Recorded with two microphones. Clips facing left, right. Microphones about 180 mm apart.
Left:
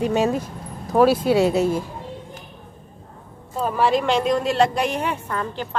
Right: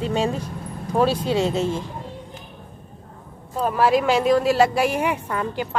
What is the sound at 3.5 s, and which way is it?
A woman's voice, centre (ahead or behind).